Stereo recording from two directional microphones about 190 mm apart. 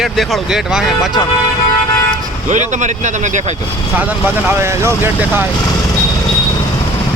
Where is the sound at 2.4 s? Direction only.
40° right (ahead or behind).